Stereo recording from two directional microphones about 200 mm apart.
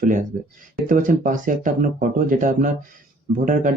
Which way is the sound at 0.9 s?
40° right (ahead or behind).